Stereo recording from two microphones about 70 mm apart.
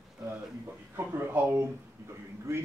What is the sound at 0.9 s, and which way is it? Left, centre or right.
Speech, right.